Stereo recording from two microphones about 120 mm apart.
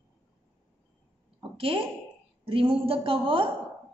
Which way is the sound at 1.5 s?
50° right (ahead or behind).